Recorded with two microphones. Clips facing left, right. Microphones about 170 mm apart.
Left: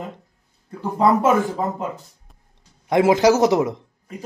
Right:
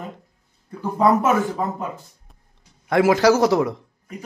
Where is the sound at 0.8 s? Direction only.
25° left (ahead or behind).